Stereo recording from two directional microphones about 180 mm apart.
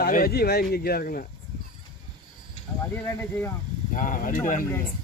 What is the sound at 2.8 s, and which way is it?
Speech, 15° left (ahead or behind).